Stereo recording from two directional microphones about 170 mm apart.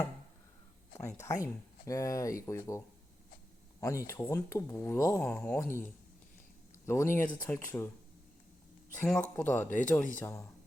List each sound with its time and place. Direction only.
0.9 s speech: 15° left (ahead or behind)
9.0 s speech: 5° left (ahead or behind)